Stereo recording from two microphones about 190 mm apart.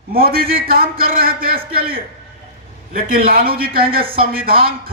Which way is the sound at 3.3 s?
50° right (ahead or behind).